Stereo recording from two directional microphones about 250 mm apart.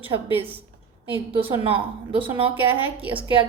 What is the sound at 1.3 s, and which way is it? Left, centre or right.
Speech, right.